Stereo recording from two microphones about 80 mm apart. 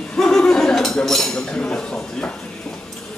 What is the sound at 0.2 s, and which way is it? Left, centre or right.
A man's voice, centre.